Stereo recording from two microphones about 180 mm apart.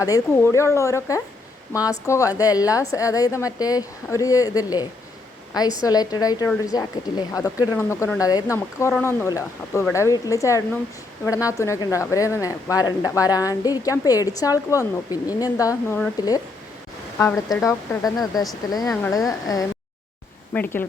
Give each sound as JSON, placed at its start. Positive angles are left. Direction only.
{"t": 0.0, "sound": "a woman's voice", "side_deg": 15}